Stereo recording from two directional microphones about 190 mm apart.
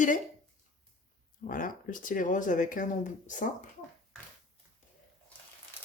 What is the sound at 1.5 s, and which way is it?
A woman's voice, 45° left (ahead or behind).